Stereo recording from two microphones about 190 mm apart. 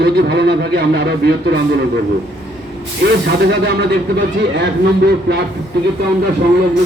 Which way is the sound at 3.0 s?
60° right (ahead or behind).